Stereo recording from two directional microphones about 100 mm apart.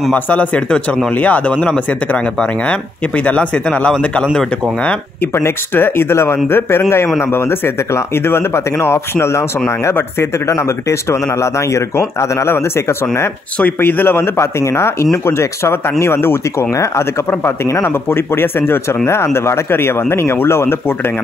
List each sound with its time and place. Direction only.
0.1 s speech: 15° left (ahead or behind)
3.3 s speech: 15° left (ahead or behind)
5.3 s speech: 20° left (ahead or behind)
10.5 s speech: 30° left (ahead or behind)